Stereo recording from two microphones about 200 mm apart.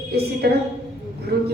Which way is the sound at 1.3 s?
55° right (ahead or behind).